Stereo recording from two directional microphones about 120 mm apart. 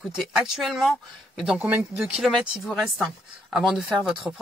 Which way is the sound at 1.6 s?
15° right (ahead or behind).